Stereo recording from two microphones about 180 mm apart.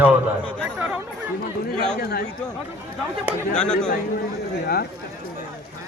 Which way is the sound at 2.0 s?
60° left (ahead or behind).